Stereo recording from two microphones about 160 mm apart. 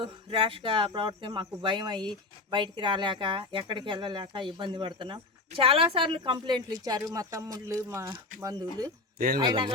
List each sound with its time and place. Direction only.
0.0 s cricket: 35° right (ahead or behind)
9.1 s speech: 65° right (ahead or behind)
9.4 s cricket: 30° right (ahead or behind)